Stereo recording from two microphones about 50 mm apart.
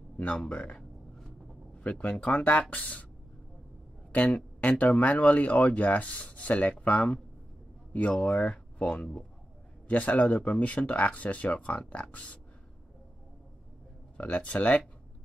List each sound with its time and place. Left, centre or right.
0.2 s speech: left
1.8 s speech: left
4.1 s speech: left
8.3 s speech: left
14.1 s speech: left